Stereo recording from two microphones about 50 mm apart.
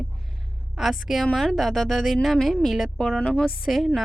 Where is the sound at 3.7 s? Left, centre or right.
Centre.